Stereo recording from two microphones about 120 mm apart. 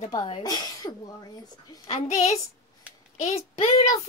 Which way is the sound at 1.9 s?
60° left (ahead or behind).